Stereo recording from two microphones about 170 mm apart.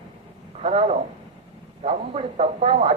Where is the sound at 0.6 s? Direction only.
35° right (ahead or behind).